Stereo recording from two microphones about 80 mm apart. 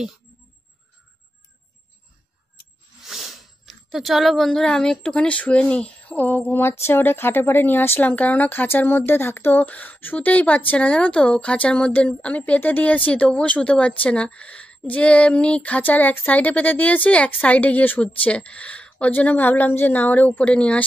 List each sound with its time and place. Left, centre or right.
3.0 s speech: centre